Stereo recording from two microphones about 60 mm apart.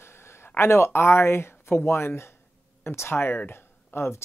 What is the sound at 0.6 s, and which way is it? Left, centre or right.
Speech, left.